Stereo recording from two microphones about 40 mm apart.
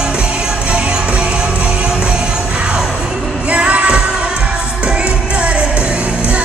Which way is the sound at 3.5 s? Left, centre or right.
Right.